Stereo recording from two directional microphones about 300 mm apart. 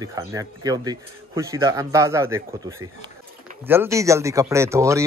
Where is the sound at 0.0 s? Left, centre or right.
Centre.